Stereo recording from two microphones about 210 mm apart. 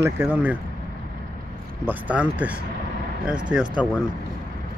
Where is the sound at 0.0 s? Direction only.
10° right (ahead or behind).